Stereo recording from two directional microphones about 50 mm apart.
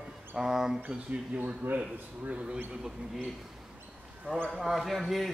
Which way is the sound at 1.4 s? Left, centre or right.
Right.